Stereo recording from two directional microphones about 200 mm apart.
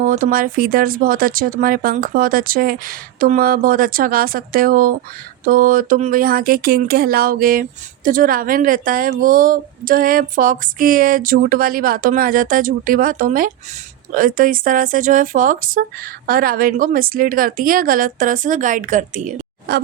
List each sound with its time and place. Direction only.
0.0 s speech: 40° right (ahead or behind)
19.7 s speech: 55° right (ahead or behind)